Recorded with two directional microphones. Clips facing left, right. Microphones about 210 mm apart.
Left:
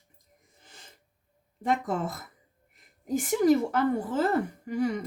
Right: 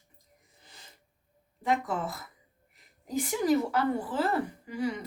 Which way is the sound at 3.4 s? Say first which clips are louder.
Left 3 dB; 45° left (ahead or behind).